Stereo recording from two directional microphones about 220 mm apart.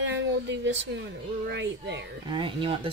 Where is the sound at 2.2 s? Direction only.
20° right (ahead or behind).